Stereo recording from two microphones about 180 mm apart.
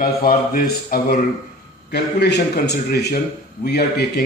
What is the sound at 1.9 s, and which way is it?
A man's voice, 70° left (ahead or behind).